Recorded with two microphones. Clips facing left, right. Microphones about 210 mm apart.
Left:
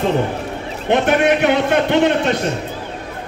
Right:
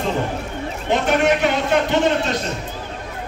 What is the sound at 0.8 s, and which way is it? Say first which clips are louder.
A man's voice: left 3 dB; 60° left (ahead or behind).